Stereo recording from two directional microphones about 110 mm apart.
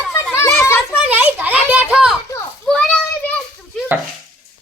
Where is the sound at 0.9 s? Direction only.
15° right (ahead or behind).